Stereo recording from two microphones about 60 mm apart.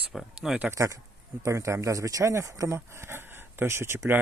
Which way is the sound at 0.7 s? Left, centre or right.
Right.